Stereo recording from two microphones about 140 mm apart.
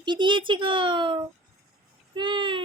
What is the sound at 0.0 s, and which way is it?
A woman's voice, 35° right (ahead or behind).